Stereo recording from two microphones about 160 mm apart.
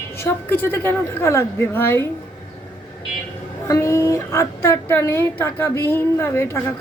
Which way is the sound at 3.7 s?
20° left (ahead or behind).